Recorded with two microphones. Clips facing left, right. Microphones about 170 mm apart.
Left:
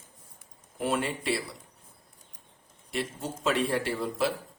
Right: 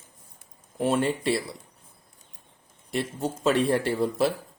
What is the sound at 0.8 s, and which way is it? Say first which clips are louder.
Speech: right 5 dB; 35° right (ahead or behind).